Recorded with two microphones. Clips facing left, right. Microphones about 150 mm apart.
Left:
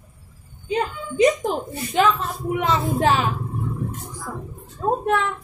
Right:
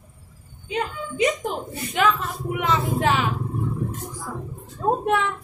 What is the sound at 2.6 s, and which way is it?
Vehicle, 35° left (ahead or behind).